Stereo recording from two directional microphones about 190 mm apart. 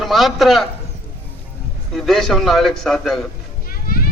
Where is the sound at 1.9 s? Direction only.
Centre (ahead or behind).